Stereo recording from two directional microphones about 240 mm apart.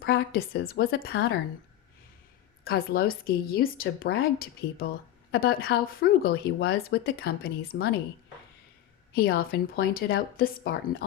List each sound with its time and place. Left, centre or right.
0.0 s speech: left
2.6 s speech: left
9.1 s speech: left